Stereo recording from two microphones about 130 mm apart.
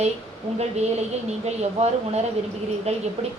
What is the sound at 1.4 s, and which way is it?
A woman's voice, 55° right (ahead or behind).